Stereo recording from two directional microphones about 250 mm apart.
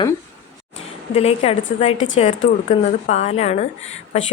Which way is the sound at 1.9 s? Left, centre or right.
Left.